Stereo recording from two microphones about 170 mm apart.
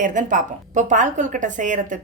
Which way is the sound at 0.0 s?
50° right (ahead or behind).